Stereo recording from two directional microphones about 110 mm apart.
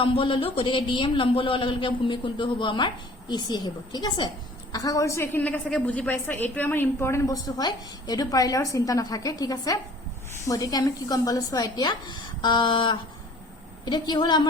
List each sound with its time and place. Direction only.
0.0 s a man's voice: 50° left (ahead or behind); by 5.4 s 25° left (ahead or behind)
5.4 s a woman's voice: 10° left (ahead or behind); by 14.4 s 40° left (ahead or behind)